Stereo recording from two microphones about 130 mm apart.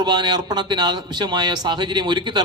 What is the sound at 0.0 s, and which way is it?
A man's voice, 35° right (ahead or behind).